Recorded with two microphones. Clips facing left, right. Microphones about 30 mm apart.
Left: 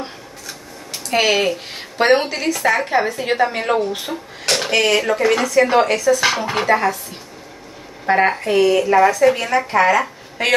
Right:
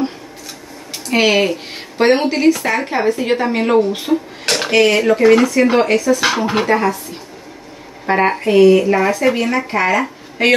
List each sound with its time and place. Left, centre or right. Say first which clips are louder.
1.0 s a woman's voice: right 3 dB; centre
8.1 s speech: right 2 dB; centre
9.1 s speech: left 1 dB; centre
9.4 s speech: left 1 dB; centre